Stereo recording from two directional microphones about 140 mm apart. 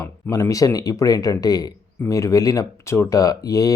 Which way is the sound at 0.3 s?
25° left (ahead or behind).